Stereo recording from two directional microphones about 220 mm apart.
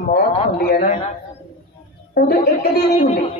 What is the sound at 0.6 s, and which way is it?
Speech, 45° left (ahead or behind).